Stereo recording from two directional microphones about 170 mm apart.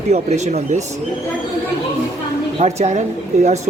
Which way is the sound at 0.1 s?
40° right (ahead or behind).